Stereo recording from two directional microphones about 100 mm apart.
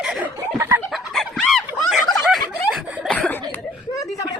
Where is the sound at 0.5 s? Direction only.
25° right (ahead or behind).